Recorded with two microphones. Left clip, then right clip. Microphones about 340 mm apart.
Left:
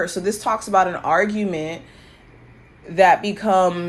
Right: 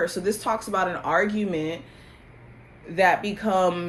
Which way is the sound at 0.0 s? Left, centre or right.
Left.